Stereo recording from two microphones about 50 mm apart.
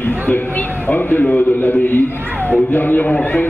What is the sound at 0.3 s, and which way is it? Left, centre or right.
A man's voice, left.